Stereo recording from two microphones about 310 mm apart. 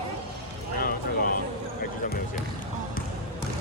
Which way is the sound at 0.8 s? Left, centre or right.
Left.